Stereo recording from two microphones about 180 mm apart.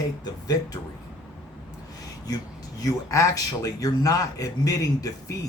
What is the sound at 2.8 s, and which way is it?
Speech, 15° left (ahead or behind).